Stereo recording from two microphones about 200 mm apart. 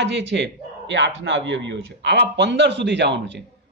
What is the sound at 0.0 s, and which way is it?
Speech, 65° right (ahead or behind).